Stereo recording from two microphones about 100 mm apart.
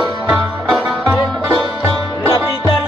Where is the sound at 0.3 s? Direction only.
10° right (ahead or behind).